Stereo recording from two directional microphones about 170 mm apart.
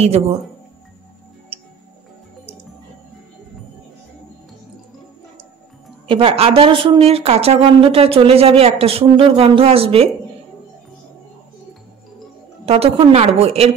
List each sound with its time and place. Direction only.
6.0 s speech: 30° right (ahead or behind)
12.6 s speech: 35° right (ahead or behind)